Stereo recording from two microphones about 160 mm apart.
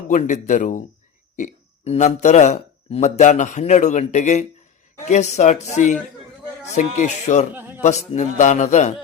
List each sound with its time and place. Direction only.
0.1 s speech: 50° left (ahead or behind)
7.5 s a man's voice: 15° right (ahead or behind)
7.8 s speech: 50° left (ahead or behind)